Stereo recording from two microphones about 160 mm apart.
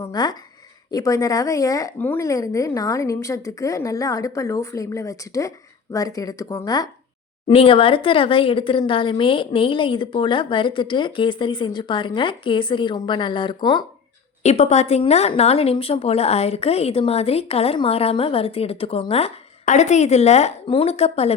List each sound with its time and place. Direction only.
0.0 s a woman's voice: 25° left (ahead or behind)
7.4 s speech: 35° left (ahead or behind)
14.4 s speech: 45° left (ahead or behind)